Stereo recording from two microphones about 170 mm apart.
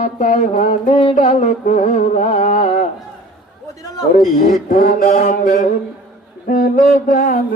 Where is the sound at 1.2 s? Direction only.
50° left (ahead or behind).